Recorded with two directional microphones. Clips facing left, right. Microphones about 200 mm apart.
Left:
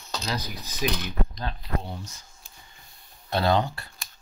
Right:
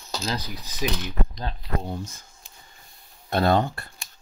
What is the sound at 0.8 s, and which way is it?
Speech, 25° right (ahead or behind).